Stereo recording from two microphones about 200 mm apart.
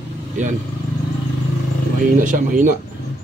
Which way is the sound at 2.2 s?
40° right (ahead or behind).